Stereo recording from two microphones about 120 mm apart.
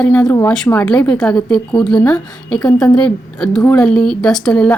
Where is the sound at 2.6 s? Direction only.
35° left (ahead or behind).